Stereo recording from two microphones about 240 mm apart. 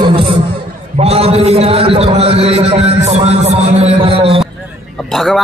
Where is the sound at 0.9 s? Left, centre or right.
Right.